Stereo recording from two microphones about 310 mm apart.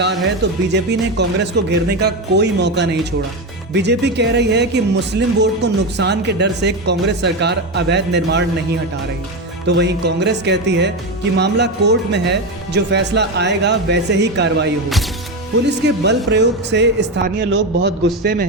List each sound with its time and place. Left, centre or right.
0.7 s speech: right
9.6 s speech: right